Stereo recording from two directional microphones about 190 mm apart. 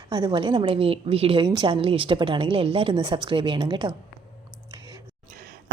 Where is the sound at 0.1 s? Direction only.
25° right (ahead or behind).